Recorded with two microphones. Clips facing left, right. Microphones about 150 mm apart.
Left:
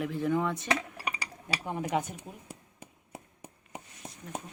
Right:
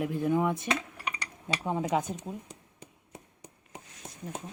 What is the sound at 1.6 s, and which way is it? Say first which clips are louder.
Speech: right 3 dB; 25° right (ahead or behind).